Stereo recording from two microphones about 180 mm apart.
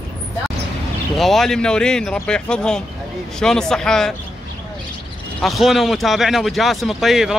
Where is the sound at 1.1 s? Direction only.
Centre (ahead or behind).